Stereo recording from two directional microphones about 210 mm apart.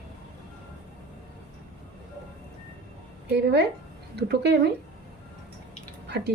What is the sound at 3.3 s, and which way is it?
Speech, 55° right (ahead or behind).